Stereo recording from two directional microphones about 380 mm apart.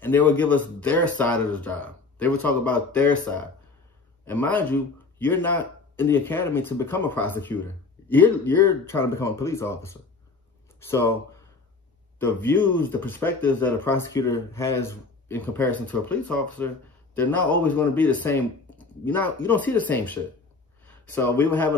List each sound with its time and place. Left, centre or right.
0.0 s speech: centre
12.2 s speech: centre